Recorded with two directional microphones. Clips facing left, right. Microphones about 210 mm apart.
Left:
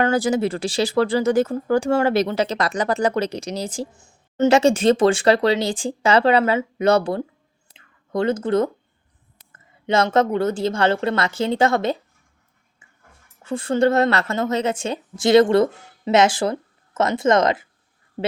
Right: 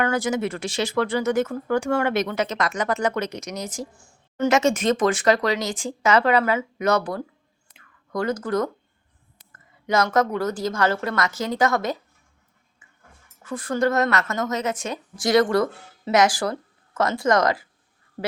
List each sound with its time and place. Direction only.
0.0 s speech: 30° left (ahead or behind)
7.7 s whispering: 25° left (ahead or behind)
9.4 s a woman's voice: 25° left (ahead or behind)
13.4 s a woman's voice: 25° left (ahead or behind)